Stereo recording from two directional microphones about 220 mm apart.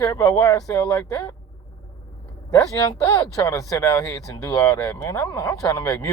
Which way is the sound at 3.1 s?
20° left (ahead or behind).